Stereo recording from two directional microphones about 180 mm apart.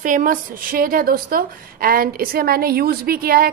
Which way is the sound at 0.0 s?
50° right (ahead or behind).